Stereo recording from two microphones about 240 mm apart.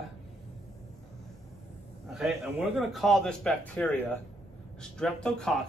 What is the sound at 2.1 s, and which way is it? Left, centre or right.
Speech, centre.